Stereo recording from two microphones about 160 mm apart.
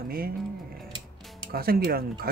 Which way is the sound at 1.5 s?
70° right (ahead or behind).